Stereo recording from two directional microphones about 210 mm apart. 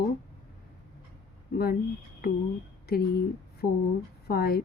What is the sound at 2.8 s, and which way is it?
A woman's voice, 50° left (ahead or behind).